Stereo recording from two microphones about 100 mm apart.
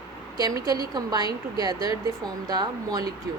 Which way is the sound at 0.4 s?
40° right (ahead or behind).